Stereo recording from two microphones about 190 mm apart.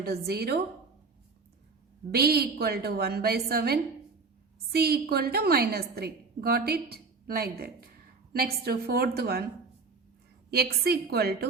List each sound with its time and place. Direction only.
0.3 s a woman's voice: 55° right (ahead or behind)
2.1 s a woman's voice: 55° right (ahead or behind)
10.5 s a woman's voice: 55° right (ahead or behind)